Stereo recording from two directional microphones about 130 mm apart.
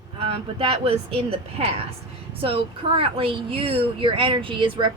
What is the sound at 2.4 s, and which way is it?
A woman's voice, 45° right (ahead or behind).